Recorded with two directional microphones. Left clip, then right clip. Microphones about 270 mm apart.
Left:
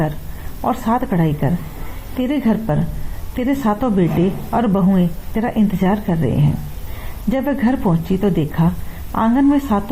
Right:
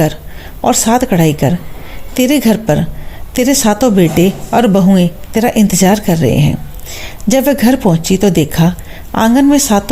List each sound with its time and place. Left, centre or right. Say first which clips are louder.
0.6 s speech: right 8 dB; right